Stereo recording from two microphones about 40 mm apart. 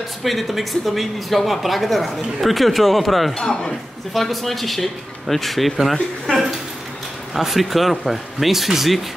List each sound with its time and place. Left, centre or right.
0.2 s speech: centre
3.3 s speech: centre
4.1 s speech: centre
7.3 s speech: centre